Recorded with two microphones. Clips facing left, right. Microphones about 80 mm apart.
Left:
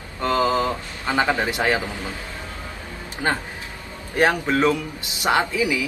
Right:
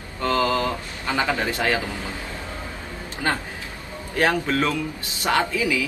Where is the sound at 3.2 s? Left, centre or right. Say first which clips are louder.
Left 1 dB; left.